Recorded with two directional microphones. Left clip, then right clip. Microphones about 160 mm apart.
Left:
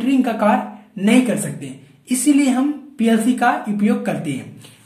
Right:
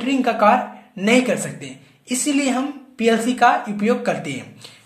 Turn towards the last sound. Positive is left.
turn(degrees=-20)  # may be behind; listen again after turning